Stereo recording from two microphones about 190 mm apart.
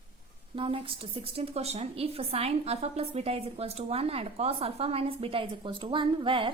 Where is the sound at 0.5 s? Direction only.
30° right (ahead or behind).